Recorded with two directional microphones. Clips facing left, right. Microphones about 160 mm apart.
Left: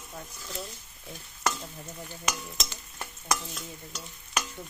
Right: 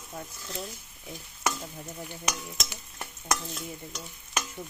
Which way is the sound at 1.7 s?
10° right (ahead or behind).